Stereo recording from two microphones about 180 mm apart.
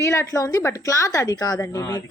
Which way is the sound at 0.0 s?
15° left (ahead or behind).